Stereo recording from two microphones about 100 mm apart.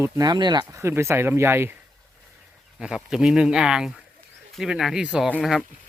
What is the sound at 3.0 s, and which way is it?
Speech, 5° right (ahead or behind).